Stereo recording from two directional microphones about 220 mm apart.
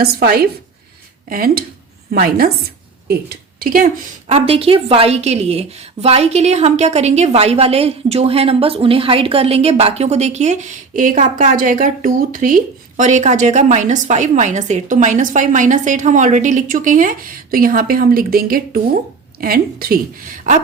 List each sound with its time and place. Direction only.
0.0 s a woman's voice: 45° right (ahead or behind)